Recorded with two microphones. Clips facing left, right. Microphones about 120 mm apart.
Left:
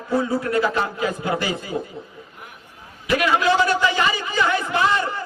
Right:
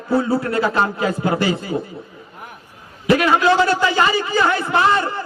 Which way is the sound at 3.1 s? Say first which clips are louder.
Right 4 dB; 35° right (ahead or behind).